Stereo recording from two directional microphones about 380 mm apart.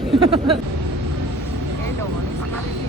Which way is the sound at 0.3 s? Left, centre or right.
Centre.